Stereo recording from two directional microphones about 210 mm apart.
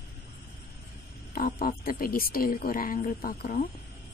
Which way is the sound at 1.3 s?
45° left (ahead or behind).